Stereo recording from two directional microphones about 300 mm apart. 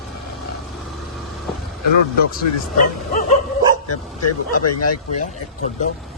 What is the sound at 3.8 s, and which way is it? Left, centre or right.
Speech, left.